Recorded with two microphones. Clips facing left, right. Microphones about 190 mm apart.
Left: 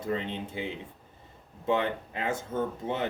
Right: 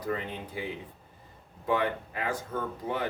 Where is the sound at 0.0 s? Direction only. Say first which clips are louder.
Left 2 dB; 25° left (ahead or behind).